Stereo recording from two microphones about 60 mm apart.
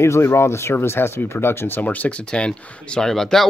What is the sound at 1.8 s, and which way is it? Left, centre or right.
Speech, left.